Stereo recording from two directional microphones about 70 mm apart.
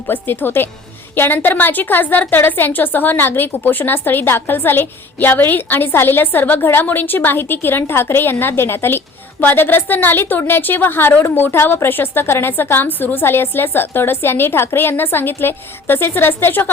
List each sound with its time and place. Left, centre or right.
0.1 s a woman's voice: left